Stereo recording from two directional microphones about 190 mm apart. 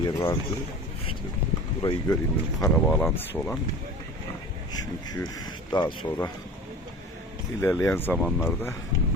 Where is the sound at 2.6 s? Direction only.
10° left (ahead or behind).